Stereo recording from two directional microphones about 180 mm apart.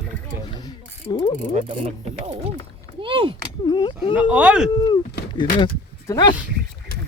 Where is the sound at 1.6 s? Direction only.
30° right (ahead or behind).